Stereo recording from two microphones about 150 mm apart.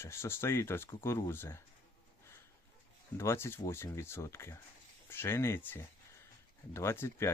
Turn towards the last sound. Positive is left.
turn(degrees=15)  # may be behind; listen again after turning